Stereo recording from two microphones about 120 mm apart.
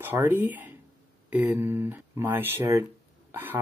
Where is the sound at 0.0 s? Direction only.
20° right (ahead or behind).